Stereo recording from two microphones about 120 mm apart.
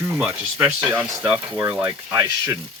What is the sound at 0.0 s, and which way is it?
Speech, 15° right (ahead or behind).